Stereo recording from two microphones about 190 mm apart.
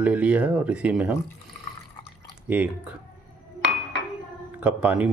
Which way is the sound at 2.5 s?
10° right (ahead or behind).